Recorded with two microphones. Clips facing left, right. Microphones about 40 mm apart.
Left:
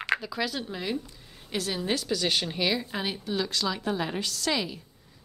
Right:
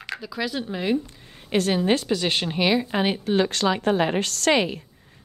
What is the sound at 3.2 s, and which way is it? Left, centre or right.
A woman's voice, right.